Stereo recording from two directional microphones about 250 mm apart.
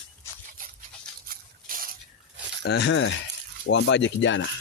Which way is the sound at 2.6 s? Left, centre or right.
Left.